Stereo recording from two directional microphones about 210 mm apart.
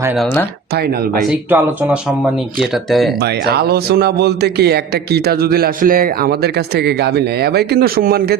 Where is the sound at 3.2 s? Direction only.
50° right (ahead or behind).